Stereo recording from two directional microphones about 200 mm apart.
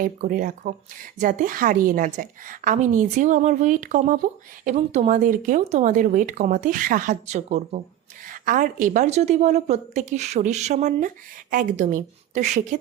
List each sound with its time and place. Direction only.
0.0 s speech: 40° right (ahead or behind)